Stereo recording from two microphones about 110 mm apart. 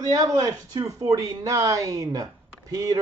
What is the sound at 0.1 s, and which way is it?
Speech, 35° right (ahead or behind).